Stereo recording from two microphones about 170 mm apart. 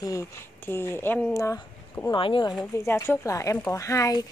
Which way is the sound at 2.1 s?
30° left (ahead or behind).